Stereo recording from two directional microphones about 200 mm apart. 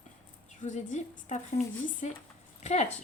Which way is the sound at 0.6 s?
35° left (ahead or behind).